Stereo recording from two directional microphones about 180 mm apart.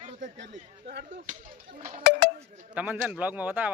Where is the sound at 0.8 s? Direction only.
60° right (ahead or behind).